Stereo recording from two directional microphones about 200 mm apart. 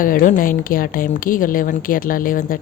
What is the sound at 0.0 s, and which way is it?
Speech, 40° left (ahead or behind).